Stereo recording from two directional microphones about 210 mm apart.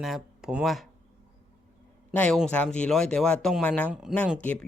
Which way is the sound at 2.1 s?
5° left (ahead or behind).